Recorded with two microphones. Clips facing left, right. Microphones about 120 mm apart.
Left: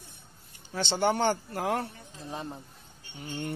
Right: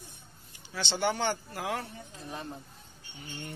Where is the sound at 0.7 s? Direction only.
45° left (ahead or behind).